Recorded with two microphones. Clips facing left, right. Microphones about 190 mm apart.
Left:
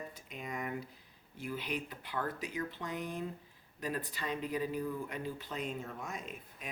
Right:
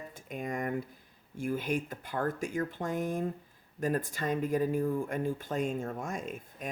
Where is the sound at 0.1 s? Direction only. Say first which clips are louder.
Right 7 dB; 50° right (ahead or behind).